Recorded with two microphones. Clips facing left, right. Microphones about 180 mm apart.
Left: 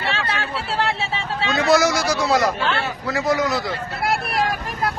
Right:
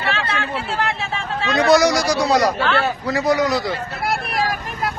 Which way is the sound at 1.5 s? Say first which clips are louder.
Right 3 dB; centre (ahead or behind).